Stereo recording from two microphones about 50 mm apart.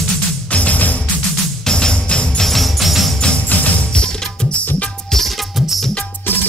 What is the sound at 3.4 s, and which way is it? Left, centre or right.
Music, left.